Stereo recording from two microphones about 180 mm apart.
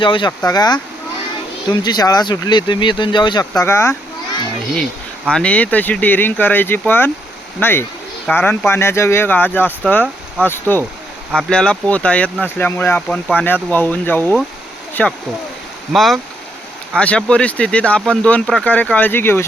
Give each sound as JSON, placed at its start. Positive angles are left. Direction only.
{"t": 0.0, "sound": "speech", "side_deg": 25}
{"t": 4.7, "sound": "speech", "side_deg": 0}